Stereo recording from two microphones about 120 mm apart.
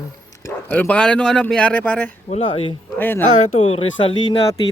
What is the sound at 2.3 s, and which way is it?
Speech, 55° left (ahead or behind).